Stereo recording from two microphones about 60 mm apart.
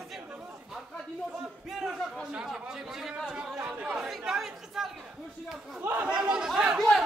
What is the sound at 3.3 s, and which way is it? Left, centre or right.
Chatter, centre.